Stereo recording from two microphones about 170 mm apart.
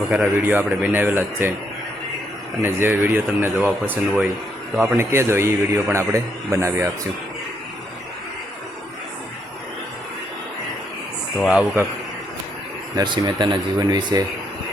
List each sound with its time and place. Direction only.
0.1 s a man's voice: 10° right (ahead or behind)
2.6 s a man's voice: 15° right (ahead or behind)
4.9 s a man's voice: 15° right (ahead or behind)
11.4 s a man's voice: 10° right (ahead or behind)
13.0 s speech: 25° right (ahead or behind)